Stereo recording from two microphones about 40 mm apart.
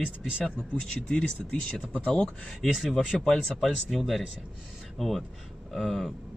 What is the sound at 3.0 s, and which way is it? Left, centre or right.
Speech, centre.